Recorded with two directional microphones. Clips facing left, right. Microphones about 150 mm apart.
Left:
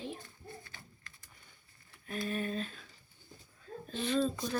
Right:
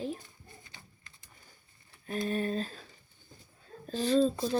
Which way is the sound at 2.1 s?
35° right (ahead or behind).